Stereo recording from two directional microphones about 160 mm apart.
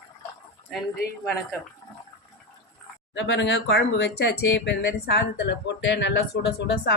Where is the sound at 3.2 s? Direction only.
90° left.